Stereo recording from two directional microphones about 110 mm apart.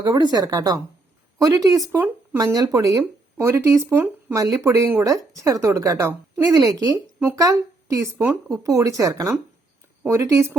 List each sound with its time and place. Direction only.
0.0 s a woman's voice: 40° right (ahead or behind)